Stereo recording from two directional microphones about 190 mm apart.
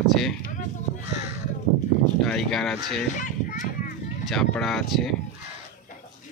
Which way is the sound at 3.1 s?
45° left (ahead or behind).